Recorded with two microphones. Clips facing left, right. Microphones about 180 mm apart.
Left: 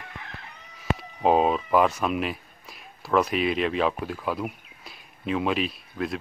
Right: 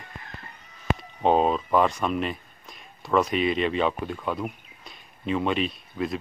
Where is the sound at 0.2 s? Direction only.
75° left (ahead or behind).